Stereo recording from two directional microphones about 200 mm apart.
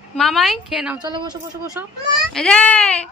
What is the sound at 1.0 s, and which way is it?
Speech, 20° right (ahead or behind).